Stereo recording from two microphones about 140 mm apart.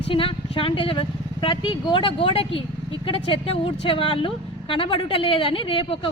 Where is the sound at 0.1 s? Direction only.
40° left (ahead or behind).